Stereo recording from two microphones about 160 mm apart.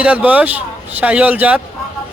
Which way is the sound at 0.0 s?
10° right (ahead or behind).